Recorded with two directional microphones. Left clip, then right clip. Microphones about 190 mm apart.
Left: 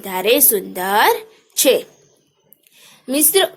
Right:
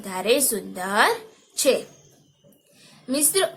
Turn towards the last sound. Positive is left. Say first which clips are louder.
# left 7 dB
turn(degrees=40)  # may be behind; listen again after turning